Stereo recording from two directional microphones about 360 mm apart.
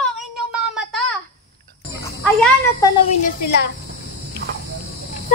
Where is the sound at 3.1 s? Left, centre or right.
Left.